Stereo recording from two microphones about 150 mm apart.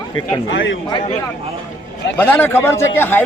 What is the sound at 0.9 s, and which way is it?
Speech, 30° left (ahead or behind).